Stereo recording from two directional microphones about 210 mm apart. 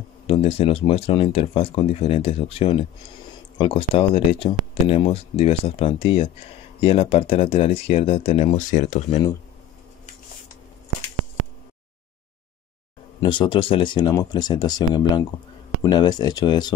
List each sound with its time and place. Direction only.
0.3 s speech: 30° left (ahead or behind)
13.2 s speech: 25° left (ahead or behind)